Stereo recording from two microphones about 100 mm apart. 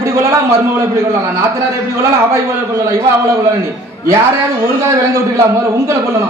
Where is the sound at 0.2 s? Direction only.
25° right (ahead or behind).